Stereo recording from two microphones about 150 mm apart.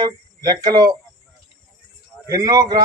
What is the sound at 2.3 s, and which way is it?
Speech, 25° right (ahead or behind).